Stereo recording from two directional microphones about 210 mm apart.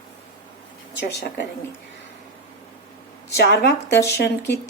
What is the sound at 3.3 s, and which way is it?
A woman's voice, 55° left (ahead or behind).